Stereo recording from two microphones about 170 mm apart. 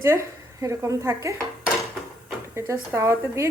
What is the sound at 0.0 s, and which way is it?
Speech, 15° right (ahead or behind).